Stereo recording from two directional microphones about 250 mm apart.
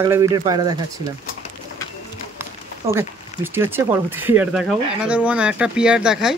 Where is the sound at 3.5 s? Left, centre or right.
Centre.